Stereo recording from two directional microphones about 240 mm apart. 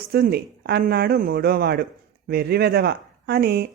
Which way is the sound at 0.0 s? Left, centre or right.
Right.